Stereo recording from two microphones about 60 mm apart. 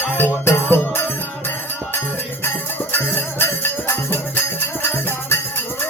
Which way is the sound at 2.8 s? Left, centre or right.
Left.